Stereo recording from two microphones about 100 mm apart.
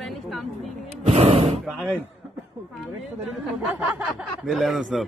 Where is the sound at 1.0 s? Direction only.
90° right.